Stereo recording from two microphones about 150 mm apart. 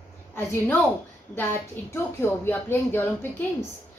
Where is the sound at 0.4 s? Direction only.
15° left (ahead or behind).